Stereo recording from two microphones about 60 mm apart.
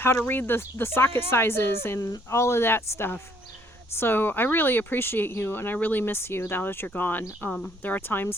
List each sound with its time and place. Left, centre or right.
0.0 s speech: left
2.0 s speech: left